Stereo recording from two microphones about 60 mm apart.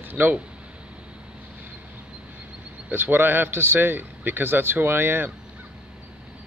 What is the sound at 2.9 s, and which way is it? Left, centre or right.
A man's voice, right.